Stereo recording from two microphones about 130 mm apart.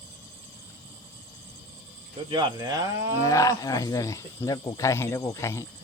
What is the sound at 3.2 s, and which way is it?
Speech, 25° left (ahead or behind).